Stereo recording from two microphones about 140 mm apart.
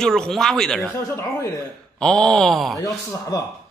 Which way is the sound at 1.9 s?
5° left (ahead or behind).